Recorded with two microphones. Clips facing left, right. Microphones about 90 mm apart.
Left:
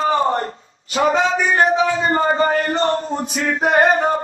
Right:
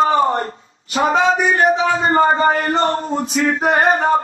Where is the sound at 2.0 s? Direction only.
40° right (ahead or behind).